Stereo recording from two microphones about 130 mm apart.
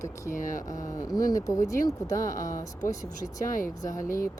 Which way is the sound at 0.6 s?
25° left (ahead or behind).